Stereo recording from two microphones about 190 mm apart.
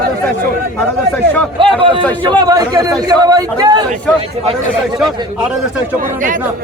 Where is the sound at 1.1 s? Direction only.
10° left (ahead or behind).